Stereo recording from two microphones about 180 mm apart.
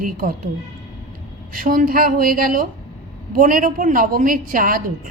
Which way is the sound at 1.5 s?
50° right (ahead or behind).